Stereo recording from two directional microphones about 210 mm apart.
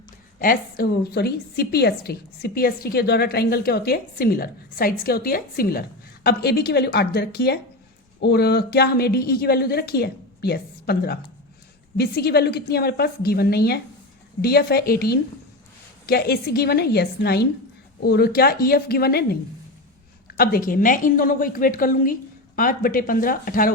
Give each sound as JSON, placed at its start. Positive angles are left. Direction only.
{"t": 0.3, "sound": "a woman's voice", "side_deg": 45}